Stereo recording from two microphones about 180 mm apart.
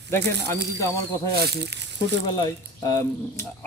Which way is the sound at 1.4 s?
65° right (ahead or behind).